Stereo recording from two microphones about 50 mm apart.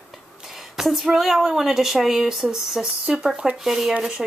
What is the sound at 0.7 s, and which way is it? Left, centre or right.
Speech, centre.